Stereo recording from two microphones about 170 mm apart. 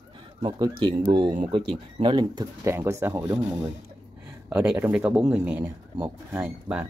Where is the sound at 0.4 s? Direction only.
25° right (ahead or behind).